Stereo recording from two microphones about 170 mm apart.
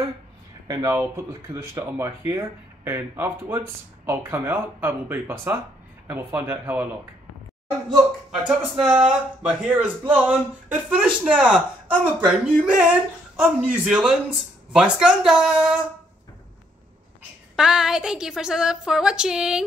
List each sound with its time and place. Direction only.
0.7 s speech: 20° right (ahead or behind)
8.5 s a woman's voice: 5° right (ahead or behind)
17.6 s a woman's voice: 5° right (ahead or behind)